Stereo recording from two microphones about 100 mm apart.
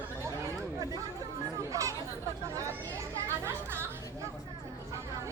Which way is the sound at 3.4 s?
25° right (ahead or behind).